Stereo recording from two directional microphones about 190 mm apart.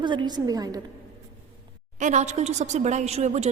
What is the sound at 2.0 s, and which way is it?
A woman's voice, 40° right (ahead or behind).